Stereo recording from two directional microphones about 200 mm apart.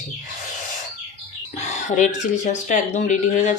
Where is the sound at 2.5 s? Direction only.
35° left (ahead or behind).